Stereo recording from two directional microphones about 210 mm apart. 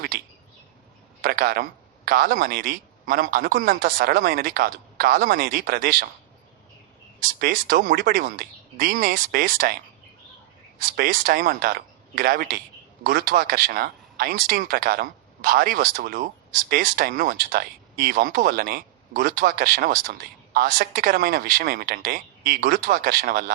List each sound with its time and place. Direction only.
1.2 s speech: 45° right (ahead or behind)
7.2 s speech: 45° right (ahead or behind)
10.8 s speech: 45° right (ahead or behind)